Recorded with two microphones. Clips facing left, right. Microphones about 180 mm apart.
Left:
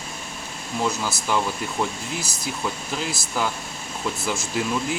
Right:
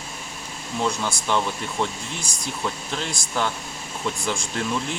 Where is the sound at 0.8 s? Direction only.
5° left (ahead or behind).